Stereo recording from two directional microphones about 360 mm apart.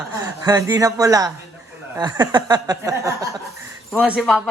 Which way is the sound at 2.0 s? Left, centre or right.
Centre.